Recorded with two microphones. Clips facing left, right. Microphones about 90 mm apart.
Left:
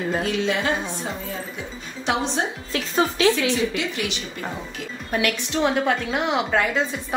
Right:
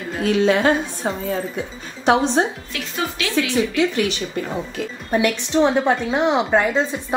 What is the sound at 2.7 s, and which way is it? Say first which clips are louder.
Speech: left 4 dB; 30° left (ahead or behind).